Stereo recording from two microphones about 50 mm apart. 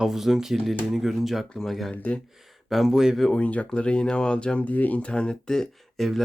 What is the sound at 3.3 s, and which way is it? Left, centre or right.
Speech, left.